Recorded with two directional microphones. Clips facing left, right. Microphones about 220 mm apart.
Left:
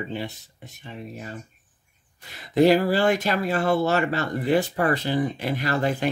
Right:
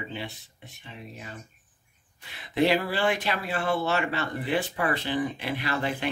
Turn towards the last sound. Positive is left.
turn(degrees=40)  # may be behind; listen again after turning